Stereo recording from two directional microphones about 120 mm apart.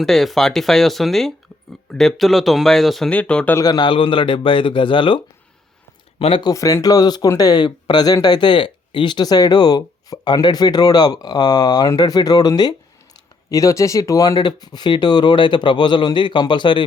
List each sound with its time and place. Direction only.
0.0 s speech: centre (ahead or behind)
3.5 s a man's voice: 30° left (ahead or behind); by 6.5 s 50° left (ahead or behind)
6.5 s speech: 30° left (ahead or behind)